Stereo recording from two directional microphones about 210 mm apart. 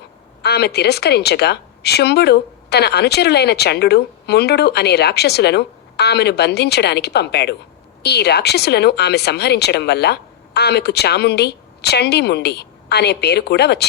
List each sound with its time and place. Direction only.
0.4 s a woman's voice: 50° left (ahead or behind)